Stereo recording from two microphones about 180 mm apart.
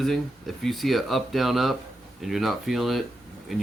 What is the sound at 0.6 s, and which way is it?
Speech, centre (ahead or behind).